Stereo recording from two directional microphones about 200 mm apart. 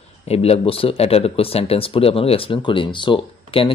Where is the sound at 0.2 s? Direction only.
30° left (ahead or behind).